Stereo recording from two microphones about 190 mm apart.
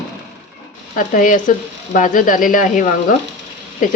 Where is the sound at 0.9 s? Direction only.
45° left (ahead or behind).